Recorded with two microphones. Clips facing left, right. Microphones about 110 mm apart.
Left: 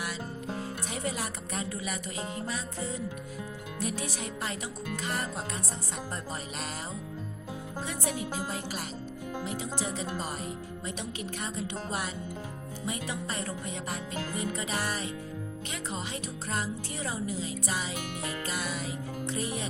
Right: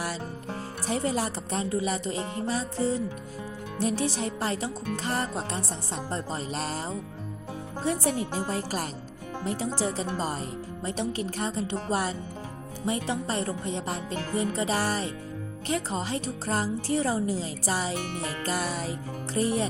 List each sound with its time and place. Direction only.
0.9 s speech: 35° right (ahead or behind)
7.9 s speech: 40° right (ahead or behind)